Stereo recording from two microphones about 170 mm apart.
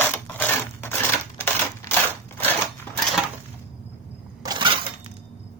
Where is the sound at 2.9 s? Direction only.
10° left (ahead or behind).